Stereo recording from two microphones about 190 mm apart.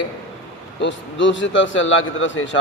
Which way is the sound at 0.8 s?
75° left (ahead or behind).